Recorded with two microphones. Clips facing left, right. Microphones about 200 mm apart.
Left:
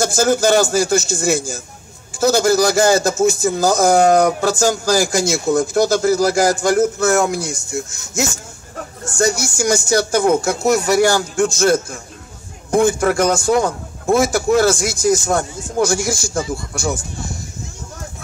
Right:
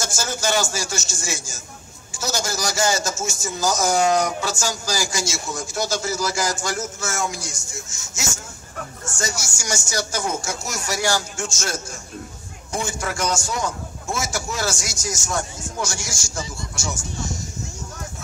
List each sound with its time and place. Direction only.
0.0 s a man's voice: 55° left (ahead or behind)